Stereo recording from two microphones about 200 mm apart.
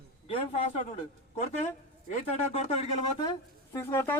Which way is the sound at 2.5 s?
25° left (ahead or behind).